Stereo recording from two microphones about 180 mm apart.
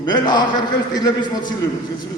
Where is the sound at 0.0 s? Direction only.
25° left (ahead or behind).